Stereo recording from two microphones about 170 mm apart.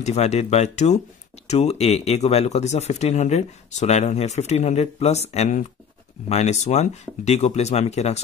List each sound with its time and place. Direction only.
0.0 s speech: 40° left (ahead or behind)